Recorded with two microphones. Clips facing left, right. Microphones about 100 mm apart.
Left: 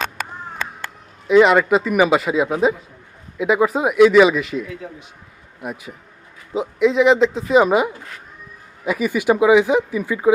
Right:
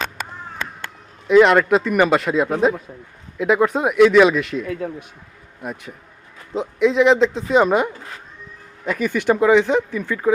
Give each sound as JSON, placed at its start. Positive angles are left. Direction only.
{"t": 1.3, "sound": "speech", "side_deg": 0}
{"t": 4.8, "sound": "a man's voice", "side_deg": -55}
{"t": 5.6, "sound": "speech", "side_deg": 5}